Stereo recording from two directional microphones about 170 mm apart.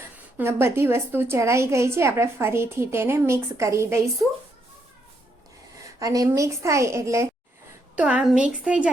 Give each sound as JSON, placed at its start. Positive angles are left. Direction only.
{"t": 0.3, "sound": "a woman's voice", "side_deg": -15}
{"t": 6.0, "sound": "a woman's voice", "side_deg": -20}